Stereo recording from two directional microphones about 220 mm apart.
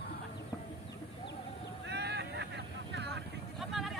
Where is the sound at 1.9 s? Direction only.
50° right (ahead or behind).